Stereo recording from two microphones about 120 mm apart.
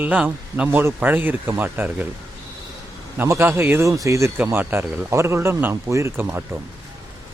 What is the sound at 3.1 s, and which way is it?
Speech, 25° right (ahead or behind).